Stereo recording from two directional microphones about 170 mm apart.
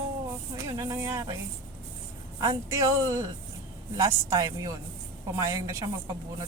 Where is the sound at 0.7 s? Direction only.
20° right (ahead or behind).